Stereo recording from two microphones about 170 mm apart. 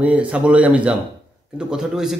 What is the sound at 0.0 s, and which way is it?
A man's voice, 5° right (ahead or behind).